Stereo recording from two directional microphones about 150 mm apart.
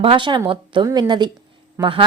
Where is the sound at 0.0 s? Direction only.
35° right (ahead or behind).